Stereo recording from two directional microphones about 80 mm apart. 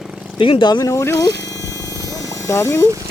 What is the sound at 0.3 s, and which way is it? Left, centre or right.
Speech, left.